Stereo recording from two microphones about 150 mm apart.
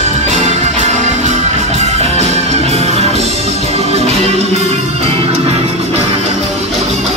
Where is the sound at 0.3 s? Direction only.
50° right (ahead or behind).